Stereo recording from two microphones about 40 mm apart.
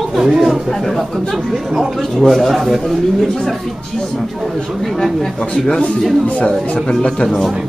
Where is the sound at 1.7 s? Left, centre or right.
Centre.